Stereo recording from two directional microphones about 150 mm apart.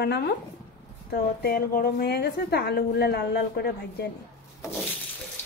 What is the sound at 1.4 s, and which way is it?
A woman's voice, 85° left.